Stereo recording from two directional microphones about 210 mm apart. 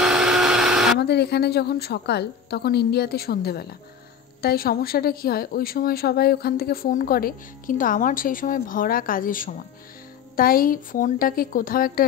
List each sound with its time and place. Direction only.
0.0 s blender: 5° right (ahead or behind)
0.9 s a woman's voice: 50° left (ahead or behind)